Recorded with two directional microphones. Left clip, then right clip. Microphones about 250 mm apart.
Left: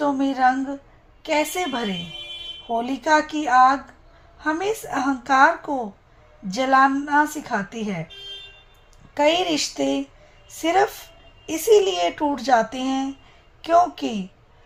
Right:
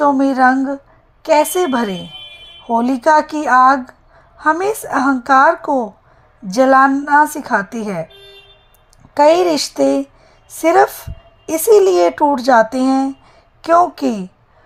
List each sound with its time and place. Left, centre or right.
0.0 s a woman's voice: right
9.1 s a woman's voice: right